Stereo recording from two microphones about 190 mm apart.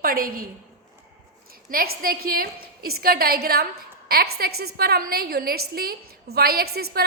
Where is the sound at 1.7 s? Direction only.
50° right (ahead or behind).